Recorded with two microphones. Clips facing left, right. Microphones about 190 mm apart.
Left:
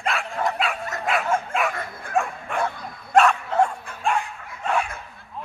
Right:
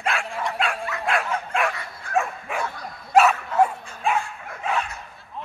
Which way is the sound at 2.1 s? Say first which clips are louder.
Even; 55° left (ahead or behind).